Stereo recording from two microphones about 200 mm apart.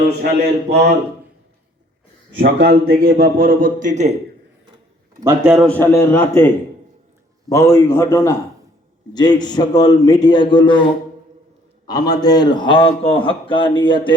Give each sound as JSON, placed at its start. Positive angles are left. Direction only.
{"t": 0.7, "sound": "speech", "side_deg": -55}
{"t": 2.4, "sound": "a man's voice", "side_deg": -50}
{"t": 5.2, "sound": "a man's voice", "side_deg": -15}
{"t": 5.5, "sound": "a man's voice", "side_deg": 5}
{"t": 7.5, "sound": "a man's voice", "side_deg": 15}
{"t": 11.9, "sound": "a man's voice", "side_deg": 20}